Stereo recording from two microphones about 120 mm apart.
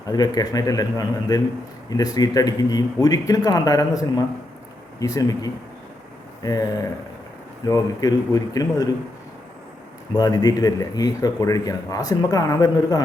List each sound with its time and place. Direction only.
0.1 s a man's voice: 35° left (ahead or behind)
10.2 s speech: 30° left (ahead or behind)